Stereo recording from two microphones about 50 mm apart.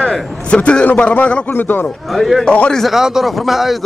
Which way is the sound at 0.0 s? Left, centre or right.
Centre.